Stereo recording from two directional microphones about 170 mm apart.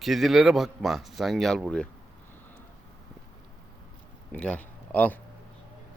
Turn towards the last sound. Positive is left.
turn(degrees=10)  # may be behind; listen again after turning